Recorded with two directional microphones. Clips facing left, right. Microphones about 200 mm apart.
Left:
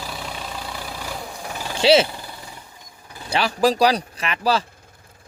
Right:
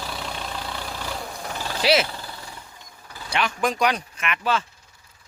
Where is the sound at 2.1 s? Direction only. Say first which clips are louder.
Left 1 dB; 15° left (ahead or behind).